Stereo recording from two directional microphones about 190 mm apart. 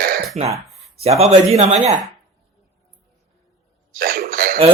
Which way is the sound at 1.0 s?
35° right (ahead or behind).